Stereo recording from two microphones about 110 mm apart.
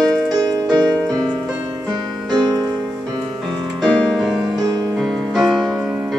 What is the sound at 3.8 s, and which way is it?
Music, 5° left (ahead or behind).